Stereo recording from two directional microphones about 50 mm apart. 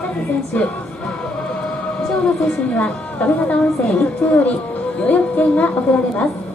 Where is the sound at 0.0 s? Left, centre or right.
Left.